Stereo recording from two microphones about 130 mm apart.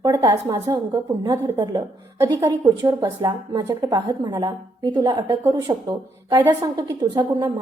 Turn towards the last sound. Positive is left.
turn(degrees=-30)  # may be behind; listen again after turning